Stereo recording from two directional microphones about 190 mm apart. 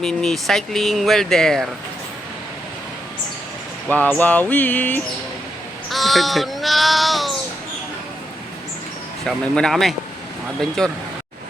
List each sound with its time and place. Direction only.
0.0 s speech: 5° left (ahead or behind)
3.8 s a sound: 10° left (ahead or behind)
5.9 s crow: centre (ahead or behind)
9.2 s speech: 5° left (ahead or behind)